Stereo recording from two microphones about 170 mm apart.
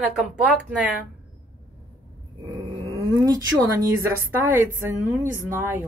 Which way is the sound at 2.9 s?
20° right (ahead or behind).